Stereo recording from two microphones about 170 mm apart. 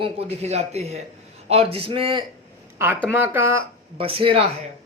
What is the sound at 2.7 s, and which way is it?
Speech, 15° right (ahead or behind).